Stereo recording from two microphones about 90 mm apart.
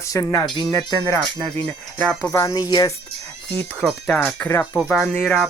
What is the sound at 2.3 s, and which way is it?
Speech, 40° left (ahead or behind).